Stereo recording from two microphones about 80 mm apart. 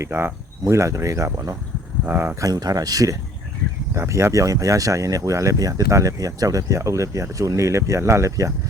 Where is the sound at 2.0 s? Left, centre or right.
Right.